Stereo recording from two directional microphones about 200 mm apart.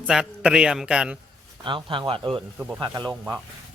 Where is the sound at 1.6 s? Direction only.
25° right (ahead or behind).